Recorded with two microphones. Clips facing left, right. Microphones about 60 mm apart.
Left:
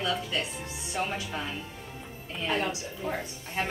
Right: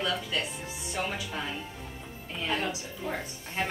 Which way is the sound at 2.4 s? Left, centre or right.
Centre.